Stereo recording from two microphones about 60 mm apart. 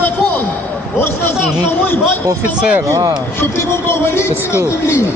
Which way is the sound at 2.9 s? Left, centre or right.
Right.